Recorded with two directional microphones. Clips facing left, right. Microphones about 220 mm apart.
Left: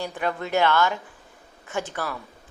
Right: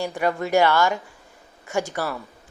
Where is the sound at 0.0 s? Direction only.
10° right (ahead or behind).